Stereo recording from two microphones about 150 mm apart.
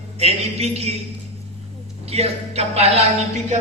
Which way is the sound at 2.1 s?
45° right (ahead or behind).